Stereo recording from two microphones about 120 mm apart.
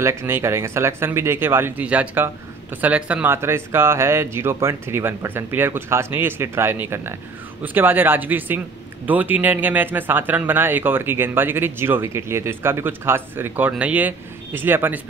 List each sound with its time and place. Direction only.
0.0 s speech: 25° right (ahead or behind)